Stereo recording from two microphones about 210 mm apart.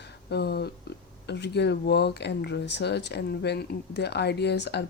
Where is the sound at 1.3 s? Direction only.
55° left (ahead or behind).